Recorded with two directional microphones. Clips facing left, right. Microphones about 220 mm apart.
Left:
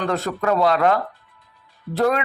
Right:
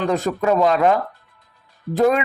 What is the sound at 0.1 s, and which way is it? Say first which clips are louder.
A man's voice: right 3 dB; 15° right (ahead or behind).